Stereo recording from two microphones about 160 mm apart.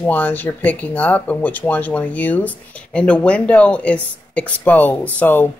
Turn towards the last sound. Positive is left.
turn(degrees=10)  # may be behind; listen again after turning